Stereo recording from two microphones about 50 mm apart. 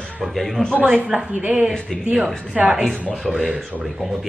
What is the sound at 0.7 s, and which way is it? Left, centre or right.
Speech, right.